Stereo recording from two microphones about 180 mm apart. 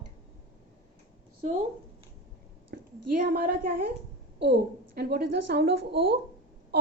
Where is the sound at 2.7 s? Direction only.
60° right (ahead or behind).